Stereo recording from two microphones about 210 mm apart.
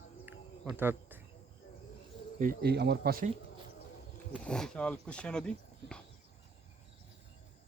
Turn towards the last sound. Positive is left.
turn(degrees=5)  # may be behind; listen again after turning